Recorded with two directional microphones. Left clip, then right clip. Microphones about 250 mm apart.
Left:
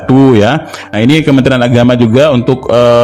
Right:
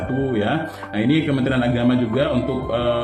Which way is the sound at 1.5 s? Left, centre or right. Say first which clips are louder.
Left 12 dB; left.